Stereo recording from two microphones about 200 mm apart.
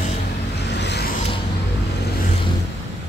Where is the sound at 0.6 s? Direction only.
60° left (ahead or behind).